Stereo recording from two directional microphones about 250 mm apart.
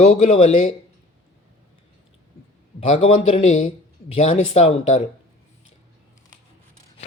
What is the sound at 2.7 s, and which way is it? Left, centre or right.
Speech, left.